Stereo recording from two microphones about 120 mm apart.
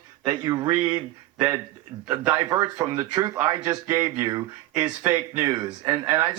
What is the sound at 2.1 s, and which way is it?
Speech, 30° right (ahead or behind).